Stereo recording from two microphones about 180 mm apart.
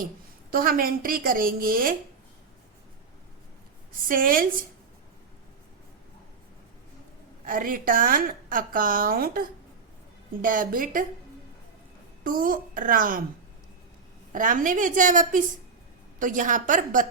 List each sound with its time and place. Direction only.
0.5 s a woman's voice: 55° right (ahead or behind)
3.9 s a woman's voice: 50° right (ahead or behind)
7.4 s a woman's voice: 50° right (ahead or behind)
12.2 s a woman's voice: 50° right (ahead or behind)
14.3 s a woman's voice: 45° right (ahead or behind)